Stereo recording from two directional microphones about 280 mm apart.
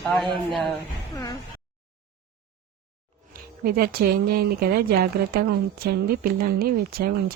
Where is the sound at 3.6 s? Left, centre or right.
Right.